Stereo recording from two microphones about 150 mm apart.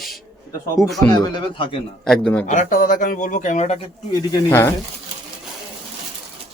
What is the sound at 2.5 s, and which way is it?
Speech, 60° left (ahead or behind).